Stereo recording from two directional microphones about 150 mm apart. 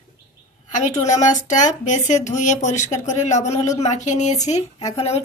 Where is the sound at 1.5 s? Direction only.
55° left (ahead or behind).